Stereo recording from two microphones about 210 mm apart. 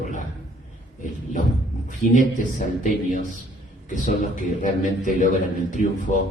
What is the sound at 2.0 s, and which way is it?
A man's voice, 40° left (ahead or behind).